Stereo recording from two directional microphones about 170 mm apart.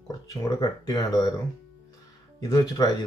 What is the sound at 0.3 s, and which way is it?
Speech, 20° left (ahead or behind).